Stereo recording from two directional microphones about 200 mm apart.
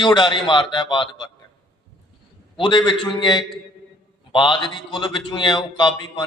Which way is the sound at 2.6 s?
25° left (ahead or behind).